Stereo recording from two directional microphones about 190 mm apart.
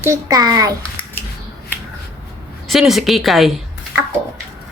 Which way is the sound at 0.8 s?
10° left (ahead or behind).